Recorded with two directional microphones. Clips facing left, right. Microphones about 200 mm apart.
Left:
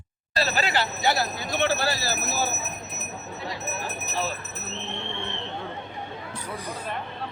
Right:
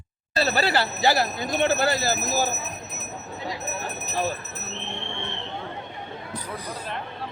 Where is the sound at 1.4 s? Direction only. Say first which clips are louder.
Right 3 dB; 45° right (ahead or behind).